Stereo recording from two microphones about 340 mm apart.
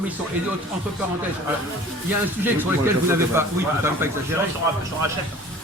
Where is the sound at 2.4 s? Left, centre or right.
Centre.